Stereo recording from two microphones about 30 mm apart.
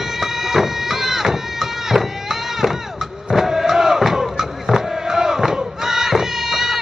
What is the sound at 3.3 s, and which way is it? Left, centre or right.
Crowd, centre.